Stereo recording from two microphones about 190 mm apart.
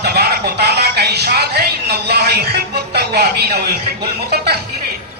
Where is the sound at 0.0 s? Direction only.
55° right (ahead or behind).